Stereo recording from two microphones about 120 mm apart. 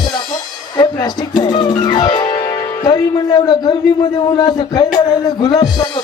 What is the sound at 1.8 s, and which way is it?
Speech, 35° left (ahead or behind).